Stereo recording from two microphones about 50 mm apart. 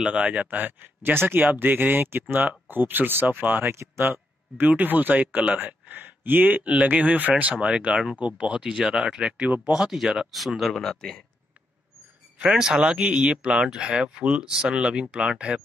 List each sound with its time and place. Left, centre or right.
0.0 s speech: right
3.7 s speech: right
4.0 s speech: right
7.6 s speech: centre
8.7 s speech: centre
12.4 s speech: centre